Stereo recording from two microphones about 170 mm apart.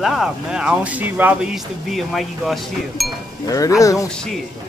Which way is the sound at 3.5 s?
20° left (ahead or behind).